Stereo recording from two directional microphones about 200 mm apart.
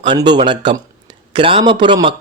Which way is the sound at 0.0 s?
25° right (ahead or behind).